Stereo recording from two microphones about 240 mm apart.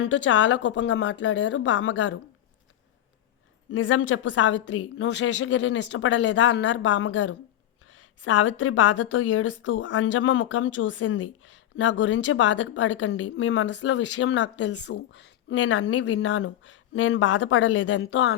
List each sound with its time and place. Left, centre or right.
0.0 s a woman's voice: left
3.7 s a woman's voice: left